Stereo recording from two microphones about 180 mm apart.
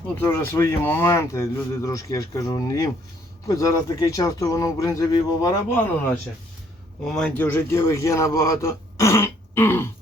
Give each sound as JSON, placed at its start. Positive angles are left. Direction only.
{"t": 0.2, "sound": "a man's voice", "side_deg": 10}
{"t": 7.0, "sound": "a man's voice", "side_deg": 5}